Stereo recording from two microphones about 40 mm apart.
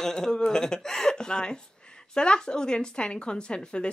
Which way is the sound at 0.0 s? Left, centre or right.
Centre.